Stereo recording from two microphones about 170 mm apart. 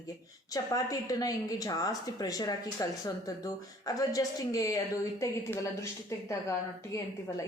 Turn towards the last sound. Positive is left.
turn(degrees=20)  # may be behind; listen again after turning